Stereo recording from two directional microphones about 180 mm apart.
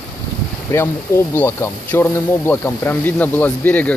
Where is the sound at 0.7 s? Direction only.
15° left (ahead or behind).